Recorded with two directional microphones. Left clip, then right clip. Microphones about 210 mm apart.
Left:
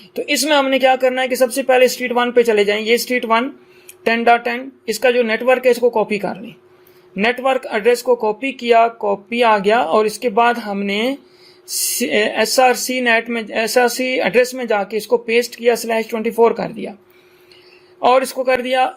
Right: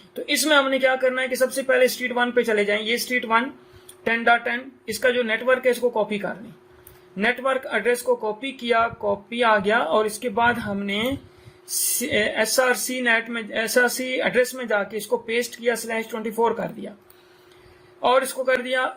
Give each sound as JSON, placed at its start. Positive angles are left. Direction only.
{"t": 0.1, "sound": "speech", "side_deg": 35}
{"t": 18.0, "sound": "speech", "side_deg": 35}